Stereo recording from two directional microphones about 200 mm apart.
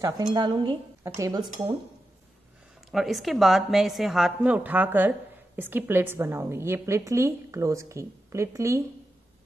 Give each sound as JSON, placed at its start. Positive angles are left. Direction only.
{"t": 0.0, "sound": "a woman's voice", "side_deg": -20}
{"t": 2.9, "sound": "a woman's voice", "side_deg": 0}